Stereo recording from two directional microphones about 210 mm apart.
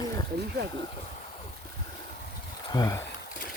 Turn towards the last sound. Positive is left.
turn(degrees=20)  # may be behind; listen again after turning